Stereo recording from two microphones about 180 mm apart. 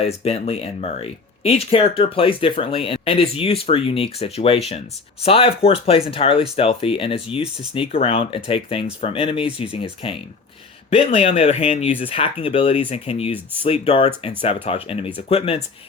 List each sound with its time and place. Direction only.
0.0 s speech: 35° left (ahead or behind)